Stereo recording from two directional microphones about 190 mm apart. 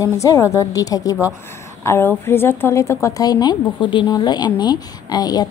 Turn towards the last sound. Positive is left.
turn(degrees=20)  # may be behind; listen again after turning